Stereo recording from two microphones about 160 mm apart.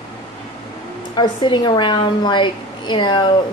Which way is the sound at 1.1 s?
30° left (ahead or behind).